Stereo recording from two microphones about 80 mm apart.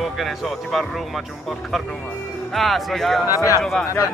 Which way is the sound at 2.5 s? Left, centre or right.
Centre.